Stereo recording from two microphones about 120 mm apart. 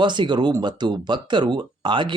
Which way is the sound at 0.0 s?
40° right (ahead or behind).